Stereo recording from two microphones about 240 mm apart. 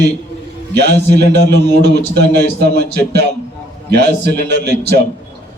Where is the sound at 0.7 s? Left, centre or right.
Right.